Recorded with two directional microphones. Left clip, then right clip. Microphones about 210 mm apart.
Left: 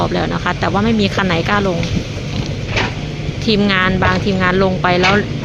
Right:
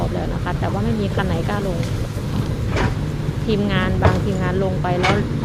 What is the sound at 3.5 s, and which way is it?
Speech, 15° left (ahead or behind).